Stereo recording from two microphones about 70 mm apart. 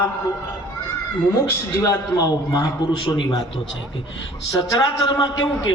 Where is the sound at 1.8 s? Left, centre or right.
Left.